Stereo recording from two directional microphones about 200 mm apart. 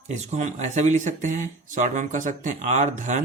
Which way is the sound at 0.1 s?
35° right (ahead or behind).